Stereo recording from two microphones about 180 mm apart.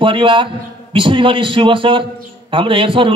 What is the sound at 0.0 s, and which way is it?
A man's voice, 30° right (ahead or behind).